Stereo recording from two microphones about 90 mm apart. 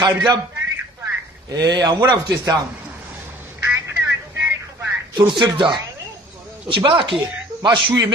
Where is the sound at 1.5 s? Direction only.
50° right (ahead or behind).